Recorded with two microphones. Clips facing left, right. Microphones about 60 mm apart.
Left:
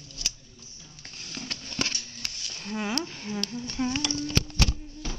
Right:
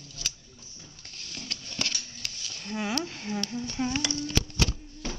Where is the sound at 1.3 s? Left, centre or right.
Centre.